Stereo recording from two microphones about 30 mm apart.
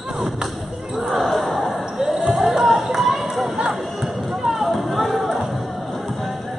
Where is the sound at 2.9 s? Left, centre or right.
Centre.